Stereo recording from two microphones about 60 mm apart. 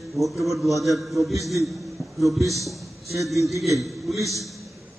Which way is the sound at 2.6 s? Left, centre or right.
Centre.